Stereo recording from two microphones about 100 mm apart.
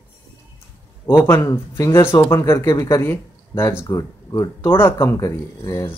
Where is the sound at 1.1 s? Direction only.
25° left (ahead or behind).